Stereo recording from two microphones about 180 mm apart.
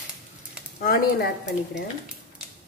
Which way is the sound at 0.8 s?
55° left (ahead or behind).